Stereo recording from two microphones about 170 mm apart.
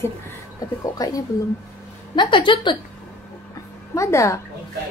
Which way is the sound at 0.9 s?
20° left (ahead or behind).